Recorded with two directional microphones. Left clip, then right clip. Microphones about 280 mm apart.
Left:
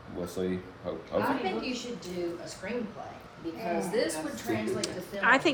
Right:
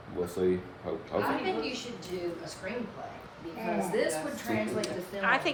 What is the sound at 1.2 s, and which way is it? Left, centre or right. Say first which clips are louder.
Speech: left 1 dB; centre.